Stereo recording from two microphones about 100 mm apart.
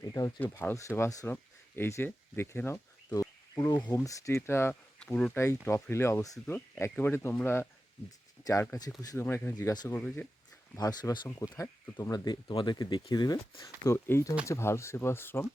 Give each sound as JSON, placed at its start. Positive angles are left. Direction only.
{"t": 0.0, "sound": "speech", "side_deg": 35}
{"t": 0.3, "sound": "speech", "side_deg": 20}
{"t": 4.7, "sound": "speech", "side_deg": 10}
{"t": 5.3, "sound": "speech", "side_deg": 25}
{"t": 6.7, "sound": "speech", "side_deg": 20}
{"t": 8.5, "sound": "speech", "side_deg": 40}
{"t": 9.1, "sound": "speech", "side_deg": 20}
{"t": 9.6, "sound": "speech", "side_deg": 40}
{"t": 9.9, "sound": "speech", "side_deg": 20}
{"t": 10.8, "sound": "speech", "side_deg": 40}
{"t": 13.8, "sound": "speech", "side_deg": 25}